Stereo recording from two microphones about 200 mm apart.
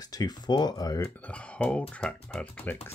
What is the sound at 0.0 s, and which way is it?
Speech, 20° left (ahead or behind).